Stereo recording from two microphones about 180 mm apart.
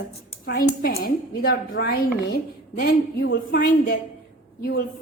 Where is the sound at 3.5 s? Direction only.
50° left (ahead or behind).